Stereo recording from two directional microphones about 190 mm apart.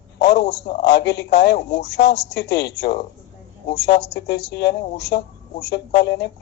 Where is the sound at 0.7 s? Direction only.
60° left (ahead or behind).